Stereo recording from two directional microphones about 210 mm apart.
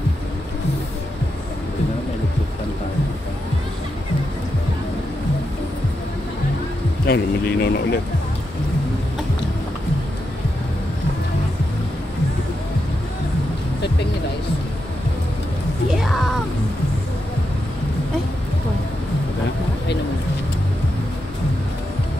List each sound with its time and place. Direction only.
7.1 s speech: 50° left (ahead or behind)
15.9 s music: centre (ahead or behind)